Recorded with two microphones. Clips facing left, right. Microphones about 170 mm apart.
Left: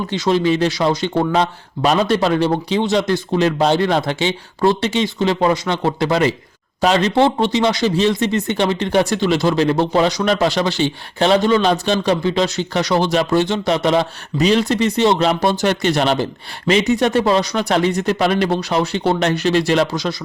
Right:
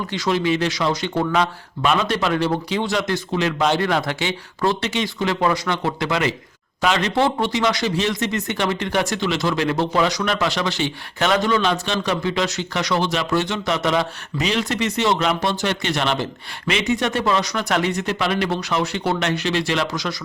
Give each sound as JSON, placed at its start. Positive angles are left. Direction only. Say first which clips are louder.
{"t": 0.1, "sound": "a man's voice", "louder": "left 4 dB", "side_deg": 30}